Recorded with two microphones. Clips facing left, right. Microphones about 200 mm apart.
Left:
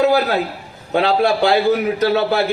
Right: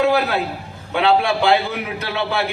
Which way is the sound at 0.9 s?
40° left (ahead or behind).